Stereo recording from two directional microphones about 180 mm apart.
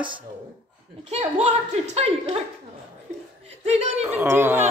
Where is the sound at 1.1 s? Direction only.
35° right (ahead or behind).